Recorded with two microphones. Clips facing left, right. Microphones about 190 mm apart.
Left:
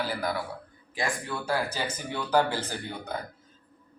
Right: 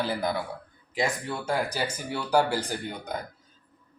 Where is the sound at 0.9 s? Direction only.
20° right (ahead or behind).